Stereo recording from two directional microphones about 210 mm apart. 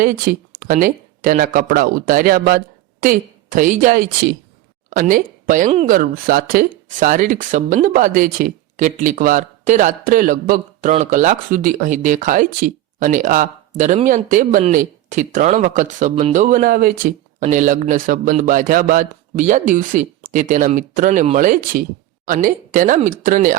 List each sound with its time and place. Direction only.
0.0 s speech: 45° right (ahead or behind)